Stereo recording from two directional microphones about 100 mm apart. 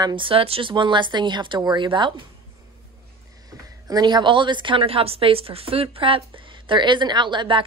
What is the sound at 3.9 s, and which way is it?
A woman's voice, 45° right (ahead or behind).